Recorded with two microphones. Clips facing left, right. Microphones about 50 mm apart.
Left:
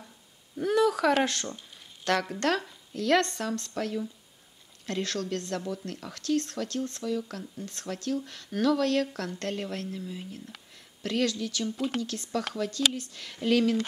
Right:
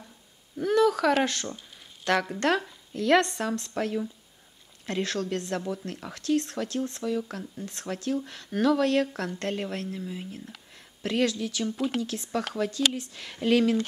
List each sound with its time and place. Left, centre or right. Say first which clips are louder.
0.6 s a sound: right 2 dB; centre
1.2 s a woman's voice: right 1 dB; centre
5.7 s a woman's voice: right 2 dB; right
7.9 s a woman's voice: right 2 dB; right